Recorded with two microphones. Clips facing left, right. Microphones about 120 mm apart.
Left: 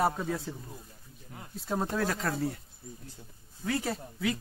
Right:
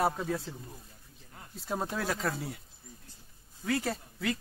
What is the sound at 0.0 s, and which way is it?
Speech, centre (ahead or behind).